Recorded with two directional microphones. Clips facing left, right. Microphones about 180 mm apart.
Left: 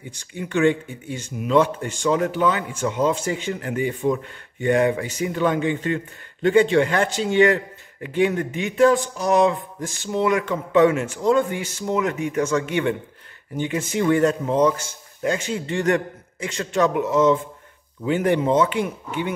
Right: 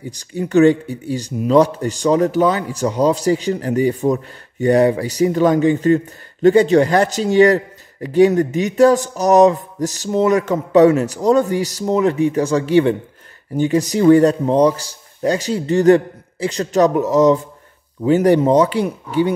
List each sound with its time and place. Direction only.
0.0 s speech: 40° right (ahead or behind)